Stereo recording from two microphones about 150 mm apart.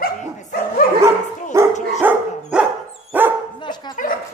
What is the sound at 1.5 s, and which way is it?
Dog, 20° right (ahead or behind).